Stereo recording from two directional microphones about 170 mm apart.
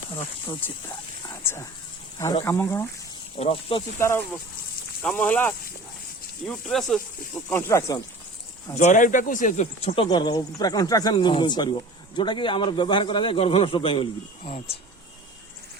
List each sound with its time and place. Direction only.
2.1 s speech: 15° left (ahead or behind)
3.4 s speech: 30° left (ahead or behind)
3.9 s speech: 15° left (ahead or behind)
7.5 s speech: 15° left (ahead or behind)
8.8 s speech: 45° left (ahead or behind); by 14.1 s 30° left (ahead or behind)
14.4 s speech: 45° left (ahead or behind)